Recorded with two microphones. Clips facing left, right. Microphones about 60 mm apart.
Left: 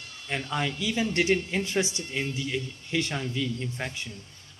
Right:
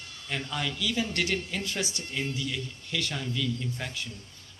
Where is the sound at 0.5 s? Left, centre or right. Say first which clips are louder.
Left 3 dB; left.